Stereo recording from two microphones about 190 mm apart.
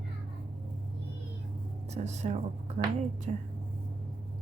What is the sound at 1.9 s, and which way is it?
Speech, 35° right (ahead or behind).